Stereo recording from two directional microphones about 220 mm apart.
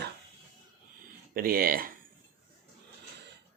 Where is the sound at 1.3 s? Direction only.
40° right (ahead or behind).